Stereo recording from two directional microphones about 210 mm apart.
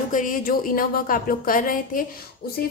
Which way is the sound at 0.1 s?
40° left (ahead or behind).